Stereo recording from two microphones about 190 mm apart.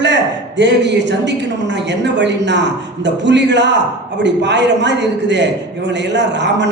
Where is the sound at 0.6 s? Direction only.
65° right (ahead or behind).